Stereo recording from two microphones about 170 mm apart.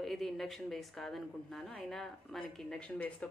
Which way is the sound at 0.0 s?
Centre (ahead or behind).